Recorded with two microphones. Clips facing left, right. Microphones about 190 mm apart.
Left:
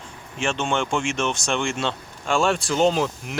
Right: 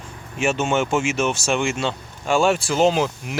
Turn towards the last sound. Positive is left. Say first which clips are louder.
# right 2 dB
turn(degrees=0)  # may be behind; listen again after turning